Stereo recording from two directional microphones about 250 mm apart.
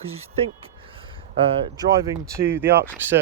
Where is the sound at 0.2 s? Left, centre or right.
Right.